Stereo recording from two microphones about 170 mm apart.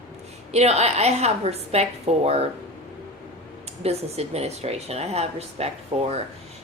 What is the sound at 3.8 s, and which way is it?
Speech, 40° right (ahead or behind).